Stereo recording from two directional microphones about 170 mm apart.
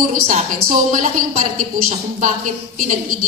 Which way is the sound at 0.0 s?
50° right (ahead or behind).